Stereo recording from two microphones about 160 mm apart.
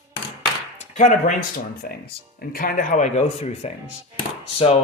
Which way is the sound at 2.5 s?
60° left (ahead or behind).